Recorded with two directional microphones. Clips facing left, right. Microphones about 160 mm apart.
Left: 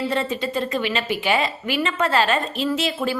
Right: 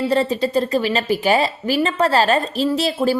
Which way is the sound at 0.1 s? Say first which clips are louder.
Right 6 dB; 35° right (ahead or behind).